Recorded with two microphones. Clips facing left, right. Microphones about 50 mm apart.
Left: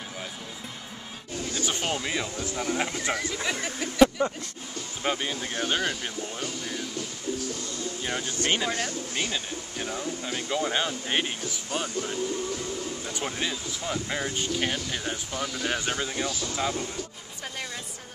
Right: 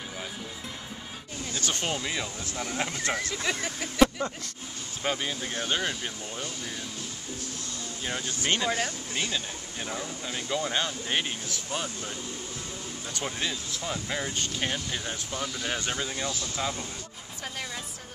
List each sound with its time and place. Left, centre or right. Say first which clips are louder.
1.5 s speech: left 1 dB; centre
4.2 s speech: left 5 dB; left
5.0 s speech: left 1 dB; centre
8.0 s speech: left 1 dB; centre
8.7 s speech: left 1 dB; centre